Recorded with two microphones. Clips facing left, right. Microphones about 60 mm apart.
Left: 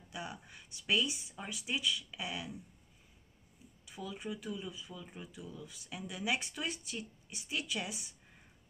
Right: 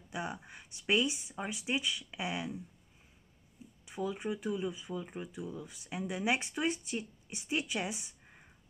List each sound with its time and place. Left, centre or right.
0.1 s a sound: right
0.5 s speech: right
3.8 s speech: right